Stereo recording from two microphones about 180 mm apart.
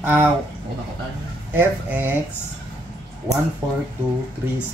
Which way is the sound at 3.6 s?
25° right (ahead or behind).